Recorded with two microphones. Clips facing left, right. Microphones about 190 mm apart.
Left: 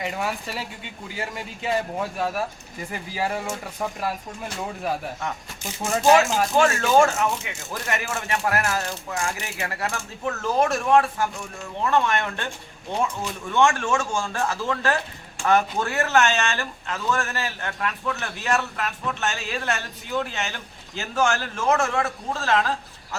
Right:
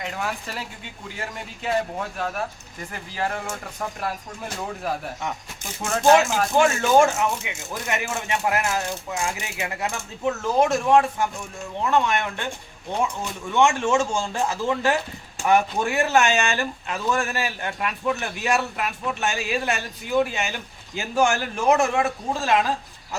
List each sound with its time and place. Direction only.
0.0 s speech: 5° left (ahead or behind)
2.9 s speech: 5° left (ahead or behind)
5.8 s speech: 5° left (ahead or behind)
6.5 s speech: 15° right (ahead or behind)
13.5 s speech: 20° right (ahead or behind)